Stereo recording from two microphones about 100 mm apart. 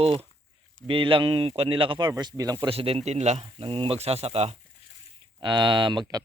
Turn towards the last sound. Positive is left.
turn(degrees=-50)  # may be behind; listen again after turning